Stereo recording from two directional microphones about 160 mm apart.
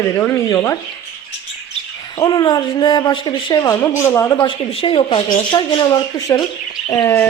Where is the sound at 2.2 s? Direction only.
25° left (ahead or behind).